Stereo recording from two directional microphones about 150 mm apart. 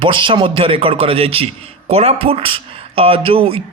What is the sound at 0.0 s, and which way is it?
Speech, 35° right (ahead or behind).